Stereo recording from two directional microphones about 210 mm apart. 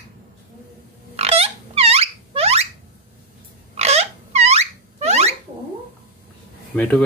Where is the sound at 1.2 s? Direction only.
30° right (ahead or behind).